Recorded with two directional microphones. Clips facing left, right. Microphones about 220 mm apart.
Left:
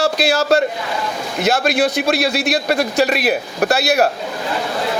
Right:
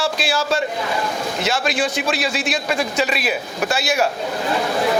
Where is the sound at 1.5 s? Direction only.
60° left (ahead or behind).